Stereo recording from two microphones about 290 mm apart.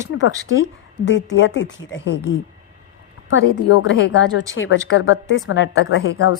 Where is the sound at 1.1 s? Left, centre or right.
Left.